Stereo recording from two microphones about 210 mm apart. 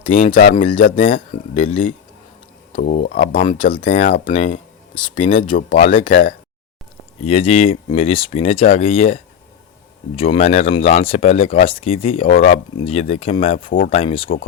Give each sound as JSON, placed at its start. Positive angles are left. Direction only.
{"t": 0.4, "sound": "speech", "side_deg": 35}
{"t": 10.2, "sound": "speech", "side_deg": 30}
{"t": 13.7, "sound": "speech", "side_deg": 40}
{"t": 13.9, "sound": "speech", "side_deg": 25}